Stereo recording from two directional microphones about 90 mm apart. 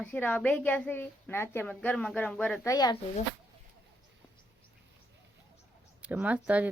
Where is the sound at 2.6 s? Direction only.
50° left (ahead or behind).